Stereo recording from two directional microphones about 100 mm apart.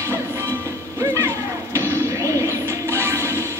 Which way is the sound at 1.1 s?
30° right (ahead or behind).